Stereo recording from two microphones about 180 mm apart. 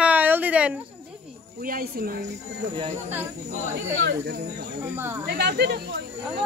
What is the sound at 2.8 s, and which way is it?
Speech, 35° right (ahead or behind).